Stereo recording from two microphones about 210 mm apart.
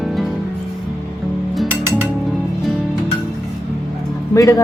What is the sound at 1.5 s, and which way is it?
Music, 5° right (ahead or behind).